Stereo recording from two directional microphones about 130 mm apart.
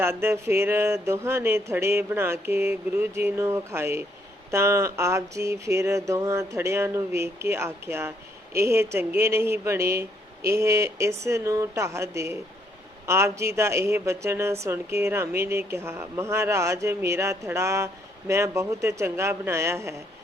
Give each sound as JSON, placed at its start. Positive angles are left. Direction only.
{"t": 0.0, "sound": "speech", "side_deg": -20}